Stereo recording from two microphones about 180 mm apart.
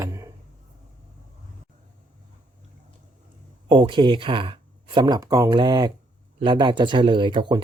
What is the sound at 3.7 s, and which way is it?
Speech, 25° right (ahead or behind).